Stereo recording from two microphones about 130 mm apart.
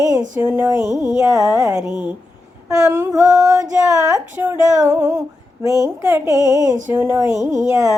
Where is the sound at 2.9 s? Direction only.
15° right (ahead or behind).